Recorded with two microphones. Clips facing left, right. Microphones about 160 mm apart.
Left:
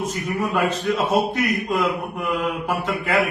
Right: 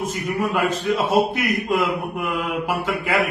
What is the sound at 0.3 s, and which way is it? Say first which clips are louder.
A man's voice: even; 10° right (ahead or behind).